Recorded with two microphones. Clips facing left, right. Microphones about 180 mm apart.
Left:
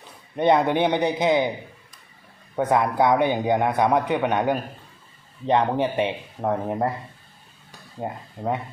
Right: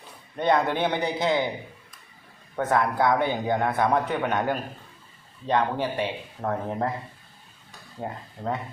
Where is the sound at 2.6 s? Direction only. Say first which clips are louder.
Left 3 dB; 15° left (ahead or behind).